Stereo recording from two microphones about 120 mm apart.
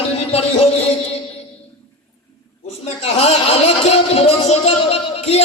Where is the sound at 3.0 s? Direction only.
60° left (ahead or behind).